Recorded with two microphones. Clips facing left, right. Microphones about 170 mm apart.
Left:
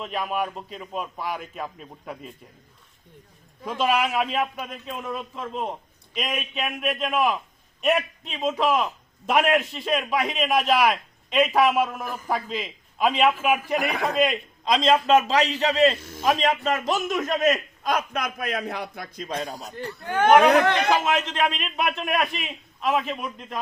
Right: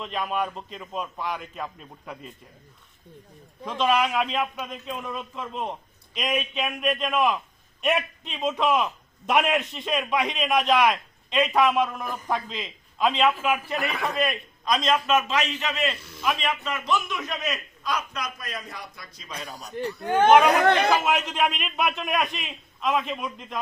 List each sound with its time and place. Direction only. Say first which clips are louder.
0.0 s a man's voice: left 1 dB; 5° left (ahead or behind)
3.7 s a man's voice: even; 5° left (ahead or behind); by 19.3 s 55° left (ahead or behind)
19.7 s a man's voice: right 5 dB; 15° right (ahead or behind)